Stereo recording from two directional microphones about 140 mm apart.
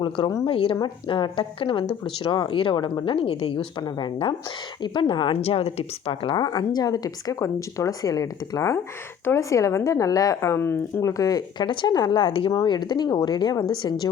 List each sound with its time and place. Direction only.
0.4 s a woman's voice: 40° left (ahead or behind)